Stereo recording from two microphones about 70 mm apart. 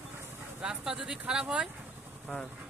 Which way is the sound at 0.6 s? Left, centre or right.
Centre.